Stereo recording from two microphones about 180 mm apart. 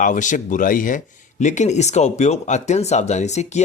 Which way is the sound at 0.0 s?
45° left (ahead or behind).